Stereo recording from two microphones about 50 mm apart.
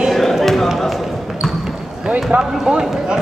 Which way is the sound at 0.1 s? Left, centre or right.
Centre.